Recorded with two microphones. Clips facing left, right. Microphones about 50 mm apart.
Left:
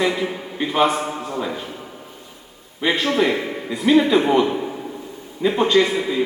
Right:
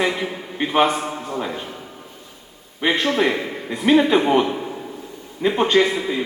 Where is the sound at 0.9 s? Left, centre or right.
Centre.